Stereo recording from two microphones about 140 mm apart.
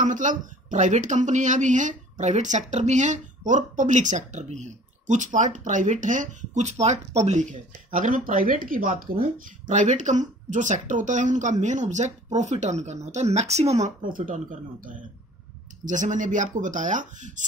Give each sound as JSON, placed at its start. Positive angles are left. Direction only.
{"t": 0.0, "sound": "speech", "side_deg": -65}
{"t": 7.9, "sound": "speech", "side_deg": -70}